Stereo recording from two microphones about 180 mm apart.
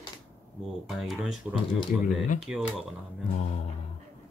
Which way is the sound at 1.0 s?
Centre (ahead or behind).